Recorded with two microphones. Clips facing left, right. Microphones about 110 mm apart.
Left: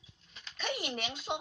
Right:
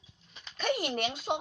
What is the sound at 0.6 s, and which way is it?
Speech, 45° right (ahead or behind).